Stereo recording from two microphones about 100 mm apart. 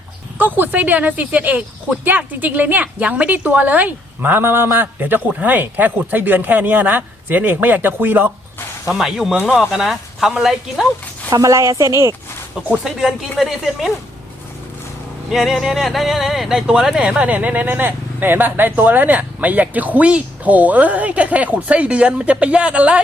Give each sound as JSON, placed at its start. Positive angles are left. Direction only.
{"t": 0.3, "sound": "speech", "side_deg": -20}
{"t": 8.9, "sound": "speech", "side_deg": 0}
{"t": 11.3, "sound": "a woman's voice", "side_deg": -35}
{"t": 12.7, "sound": "speech", "side_deg": -5}
{"t": 15.3, "sound": "speech", "side_deg": 0}